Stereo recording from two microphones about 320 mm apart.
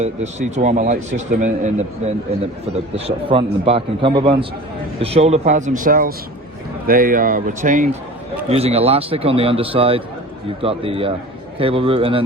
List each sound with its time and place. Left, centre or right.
0.0 s a man's voice: right